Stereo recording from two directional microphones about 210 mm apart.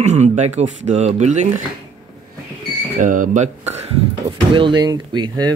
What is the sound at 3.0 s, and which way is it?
Speech, 40° right (ahead or behind).